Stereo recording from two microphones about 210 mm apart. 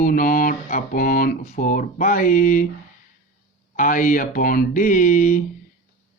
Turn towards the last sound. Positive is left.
turn(degrees=40)  # may be behind; listen again after turning